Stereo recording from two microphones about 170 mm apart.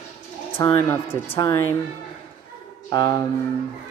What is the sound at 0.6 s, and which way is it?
Speech, 20° left (ahead or behind).